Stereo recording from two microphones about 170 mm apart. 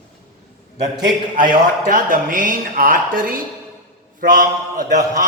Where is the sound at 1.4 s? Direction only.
50° right (ahead or behind).